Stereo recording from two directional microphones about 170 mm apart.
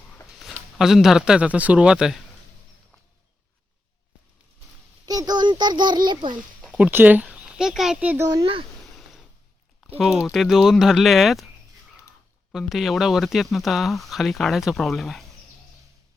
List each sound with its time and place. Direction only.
0.3 s speech: centre (ahead or behind)
5.0 s a sound: 25° right (ahead or behind)
6.1 s a child's voice: 25° right (ahead or behind)
6.6 s speech: 5° right (ahead or behind)
8.3 s a child's voice: 25° right (ahead or behind)
8.8 s a sound: centre (ahead or behind)
10.0 s speech: centre (ahead or behind)
12.5 s speech: centre (ahead or behind)